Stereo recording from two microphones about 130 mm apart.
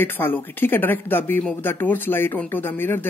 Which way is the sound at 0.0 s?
15° left (ahead or behind).